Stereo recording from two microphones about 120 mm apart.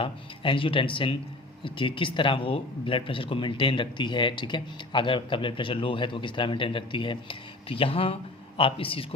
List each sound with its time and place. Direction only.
0.0 s speech: 45° left (ahead or behind)